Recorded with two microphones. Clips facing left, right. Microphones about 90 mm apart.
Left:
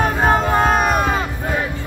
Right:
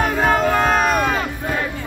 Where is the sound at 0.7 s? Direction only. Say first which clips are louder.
Even; 15° left (ahead or behind).